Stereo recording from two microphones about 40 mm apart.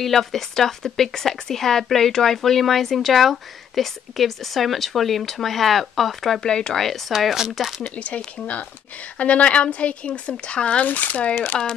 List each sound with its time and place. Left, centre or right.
0.0 s speech: centre
6.4 s speech: centre
6.8 s speech: centre
7.9 s speech: left
9.2 s speech: left
10.9 s speech: left
11.5 s speech: centre